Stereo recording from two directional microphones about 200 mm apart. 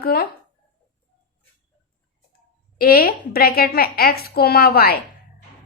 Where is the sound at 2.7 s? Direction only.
45° left (ahead or behind).